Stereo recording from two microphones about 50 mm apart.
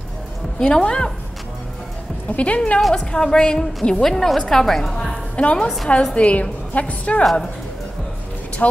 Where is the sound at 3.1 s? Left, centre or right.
Centre.